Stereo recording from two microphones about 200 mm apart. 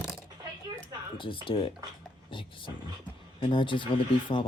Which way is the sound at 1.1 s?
25° left (ahead or behind).